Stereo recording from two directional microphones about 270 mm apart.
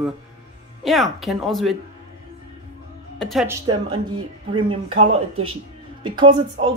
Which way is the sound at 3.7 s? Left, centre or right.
Centre.